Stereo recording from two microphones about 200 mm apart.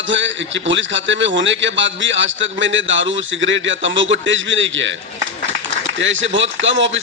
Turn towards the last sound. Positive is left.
turn(degrees=-70)  # may be behind; listen again after turning